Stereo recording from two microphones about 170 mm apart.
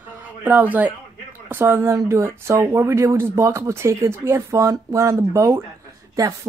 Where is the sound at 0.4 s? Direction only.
10° right (ahead or behind).